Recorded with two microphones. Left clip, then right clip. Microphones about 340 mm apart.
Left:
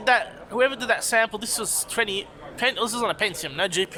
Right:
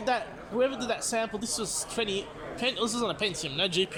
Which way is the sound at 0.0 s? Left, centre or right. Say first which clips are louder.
Left 8 dB; left.